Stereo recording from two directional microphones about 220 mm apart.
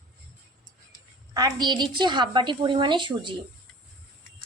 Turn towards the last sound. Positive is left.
turn(degrees=-20)  # may be behind; listen again after turning